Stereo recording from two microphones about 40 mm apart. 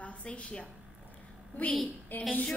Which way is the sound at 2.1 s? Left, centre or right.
Left.